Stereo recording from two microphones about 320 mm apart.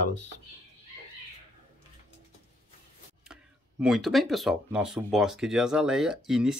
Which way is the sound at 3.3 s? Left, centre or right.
Centre.